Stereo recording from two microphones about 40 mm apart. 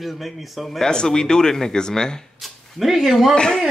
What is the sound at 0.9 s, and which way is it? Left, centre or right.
A man's voice, centre.